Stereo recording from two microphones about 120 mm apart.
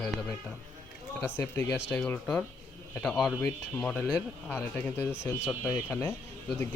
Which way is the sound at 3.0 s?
5° left (ahead or behind).